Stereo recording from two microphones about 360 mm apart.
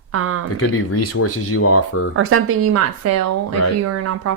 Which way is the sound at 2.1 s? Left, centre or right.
Right.